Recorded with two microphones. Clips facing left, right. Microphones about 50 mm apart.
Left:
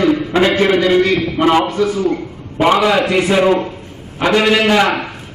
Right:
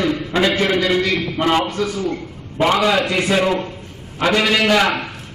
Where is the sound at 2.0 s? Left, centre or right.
Centre.